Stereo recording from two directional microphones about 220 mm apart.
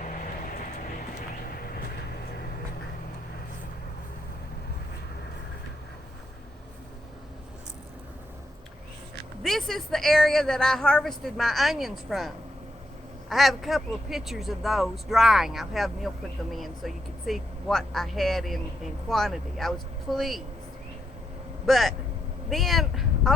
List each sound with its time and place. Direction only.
0.0 s vehicle: 35° left (ahead or behind)
9.4 s speech: centre (ahead or behind)
21.7 s speech: centre (ahead or behind)
22.4 s a sound: centre (ahead or behind)